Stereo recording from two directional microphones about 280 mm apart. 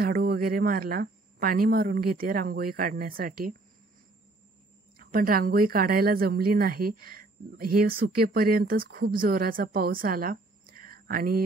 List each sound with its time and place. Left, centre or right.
0.0 s a woman's voice: right
4.9 s a woman's voice: right